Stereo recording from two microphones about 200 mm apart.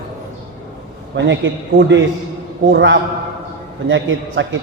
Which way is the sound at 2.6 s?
65° right (ahead or behind).